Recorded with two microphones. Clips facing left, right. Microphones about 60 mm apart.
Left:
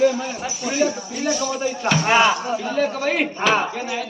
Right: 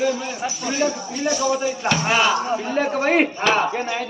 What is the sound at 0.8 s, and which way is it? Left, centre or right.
Speech, centre.